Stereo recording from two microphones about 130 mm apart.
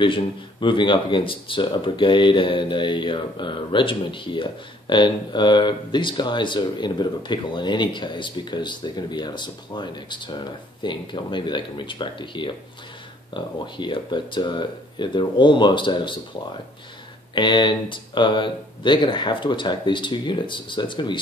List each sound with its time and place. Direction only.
0.0 s speech: 40° left (ahead or behind)
17.4 s speech: 35° left (ahead or behind)